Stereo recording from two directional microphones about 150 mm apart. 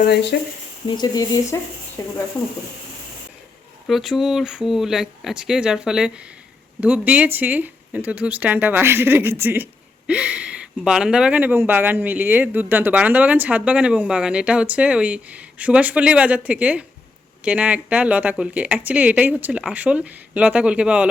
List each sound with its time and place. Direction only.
0.3 s speech: 90° left
0.9 s speech: 25° left (ahead or behind)
3.8 s speech: centre (ahead or behind)